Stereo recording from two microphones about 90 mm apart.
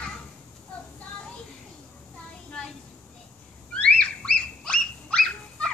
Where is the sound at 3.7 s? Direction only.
15° left (ahead or behind).